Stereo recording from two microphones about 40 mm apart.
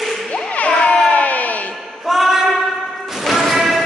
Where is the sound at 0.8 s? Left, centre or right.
Left.